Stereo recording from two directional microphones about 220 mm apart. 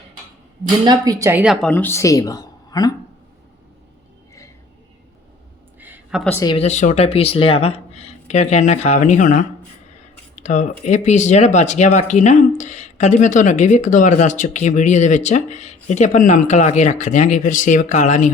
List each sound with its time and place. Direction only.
0.9 s a woman's voice: 15° right (ahead or behind)
1.6 s speech: 10° left (ahead or behind)
5.8 s a sound: 5° right (ahead or behind)
6.2 s a woman's voice: 10° left (ahead or behind)
6.5 s speech: 30° left (ahead or behind)